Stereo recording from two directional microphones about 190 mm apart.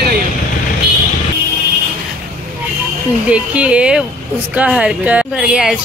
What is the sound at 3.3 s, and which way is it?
A woman's voice, 5° right (ahead or behind).